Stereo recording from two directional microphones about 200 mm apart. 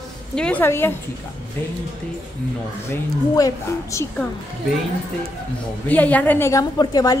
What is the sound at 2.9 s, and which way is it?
A woman's voice, 15° left (ahead or behind).